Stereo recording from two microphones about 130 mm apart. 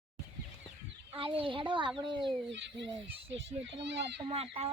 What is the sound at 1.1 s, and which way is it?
Speech, 45° right (ahead or behind).